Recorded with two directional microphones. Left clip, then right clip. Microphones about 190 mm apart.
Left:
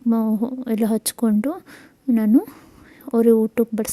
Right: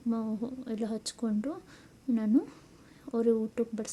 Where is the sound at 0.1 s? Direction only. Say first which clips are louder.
Left 13 dB; 45° left (ahead or behind).